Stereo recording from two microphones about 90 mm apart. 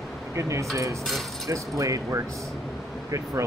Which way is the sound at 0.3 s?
35° right (ahead or behind).